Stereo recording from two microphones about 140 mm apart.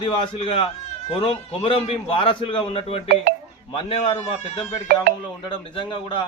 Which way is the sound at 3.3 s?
90° right.